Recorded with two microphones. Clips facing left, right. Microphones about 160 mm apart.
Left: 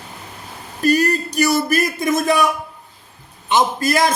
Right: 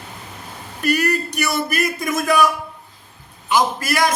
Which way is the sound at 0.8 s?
30° left (ahead or behind).